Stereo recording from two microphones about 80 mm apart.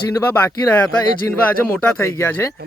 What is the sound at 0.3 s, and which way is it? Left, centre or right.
Speech, left.